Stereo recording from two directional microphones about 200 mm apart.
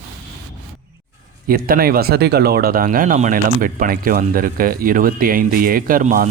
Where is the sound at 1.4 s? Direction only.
45° right (ahead or behind).